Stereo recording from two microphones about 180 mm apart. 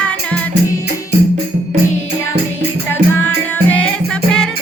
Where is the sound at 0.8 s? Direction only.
65° right (ahead or behind).